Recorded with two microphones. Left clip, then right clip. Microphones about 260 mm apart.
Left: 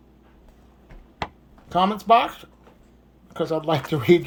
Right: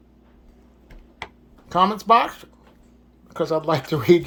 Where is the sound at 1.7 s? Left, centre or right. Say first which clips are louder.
Right 1 dB; centre.